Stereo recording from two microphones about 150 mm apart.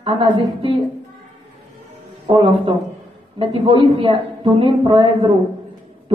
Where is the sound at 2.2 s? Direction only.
35° right (ahead or behind).